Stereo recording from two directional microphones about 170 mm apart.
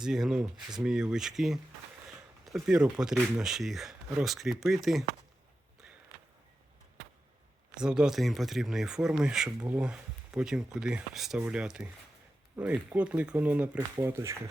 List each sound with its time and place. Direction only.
0.0 s speech: 5° right (ahead or behind)
7.8 s speech: 5° right (ahead or behind)